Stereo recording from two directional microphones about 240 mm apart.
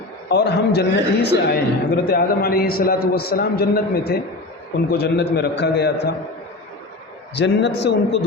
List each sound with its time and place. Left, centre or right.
0.3 s a man's voice: left
7.3 s a man's voice: left